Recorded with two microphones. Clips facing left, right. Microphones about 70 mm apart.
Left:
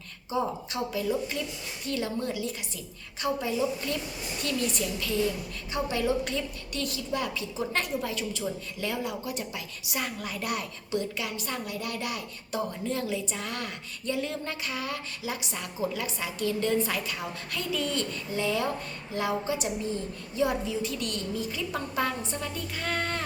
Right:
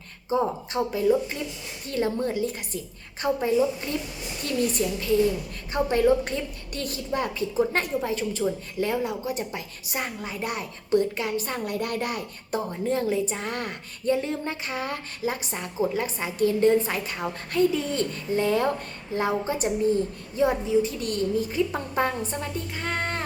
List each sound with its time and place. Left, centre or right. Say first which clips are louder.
0.3 s a woman's voice: right 5 dB; right
10.9 s a woman's voice: right 8 dB; right